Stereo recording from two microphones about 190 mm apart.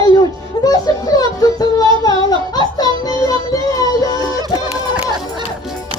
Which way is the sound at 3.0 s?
20° left (ahead or behind).